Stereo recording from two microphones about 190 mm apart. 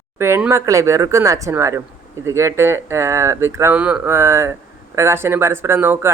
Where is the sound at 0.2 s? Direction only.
15° right (ahead or behind).